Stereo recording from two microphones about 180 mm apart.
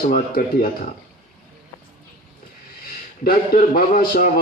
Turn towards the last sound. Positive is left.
turn(degrees=50)  # may be behind; listen again after turning